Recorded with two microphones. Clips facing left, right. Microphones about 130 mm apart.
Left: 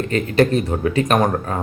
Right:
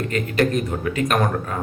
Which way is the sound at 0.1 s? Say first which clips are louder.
Left 5 dB; 30° left (ahead or behind).